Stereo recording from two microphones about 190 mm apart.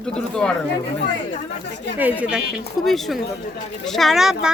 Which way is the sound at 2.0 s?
10° right (ahead or behind).